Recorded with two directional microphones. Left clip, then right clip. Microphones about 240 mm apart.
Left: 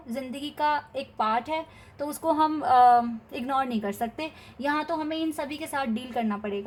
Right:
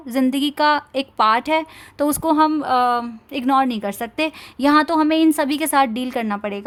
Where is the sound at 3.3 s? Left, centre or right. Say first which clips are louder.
Right 12 dB; right.